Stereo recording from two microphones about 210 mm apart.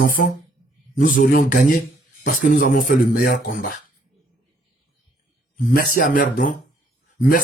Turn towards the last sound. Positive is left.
turn(degrees=45)  # may be behind; listen again after turning